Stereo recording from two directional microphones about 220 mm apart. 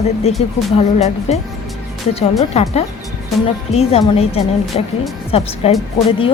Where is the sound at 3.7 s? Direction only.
30° left (ahead or behind).